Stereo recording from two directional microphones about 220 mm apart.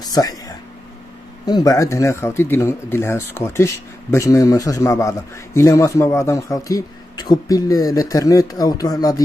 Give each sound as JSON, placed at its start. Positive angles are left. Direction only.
{"t": 0.0, "sound": "speech", "side_deg": 15}
{"t": 1.4, "sound": "a man's voice", "side_deg": 15}